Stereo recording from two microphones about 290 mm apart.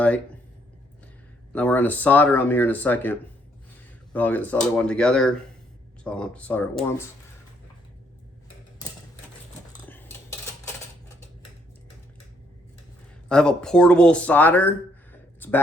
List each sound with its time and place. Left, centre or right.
1.5 s speech: centre
9.8 s cutlery: centre
13.2 s speech: centre